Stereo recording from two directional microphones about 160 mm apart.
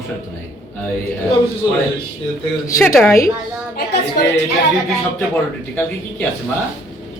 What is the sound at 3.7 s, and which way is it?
Speech, 85° left.